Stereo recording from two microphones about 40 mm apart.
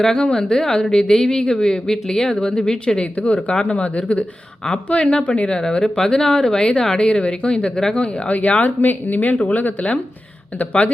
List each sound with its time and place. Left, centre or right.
0.0 s speech: centre
5.5 s speech: centre
7.9 s speech: left
8.8 s speech: left